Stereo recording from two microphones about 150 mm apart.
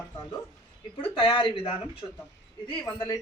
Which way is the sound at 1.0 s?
35° left (ahead or behind).